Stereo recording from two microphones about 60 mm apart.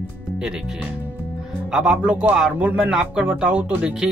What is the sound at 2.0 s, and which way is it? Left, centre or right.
Speech, right.